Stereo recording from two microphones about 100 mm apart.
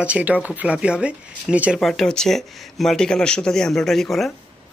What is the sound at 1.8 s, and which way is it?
Speech, 5° left (ahead or behind).